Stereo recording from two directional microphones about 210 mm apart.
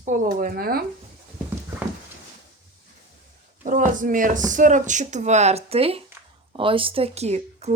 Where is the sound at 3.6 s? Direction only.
40° right (ahead or behind).